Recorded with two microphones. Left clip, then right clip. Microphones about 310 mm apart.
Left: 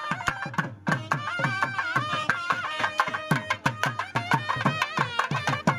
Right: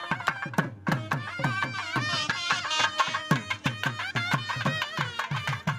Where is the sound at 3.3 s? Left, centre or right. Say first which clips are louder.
Left 3 dB; centre.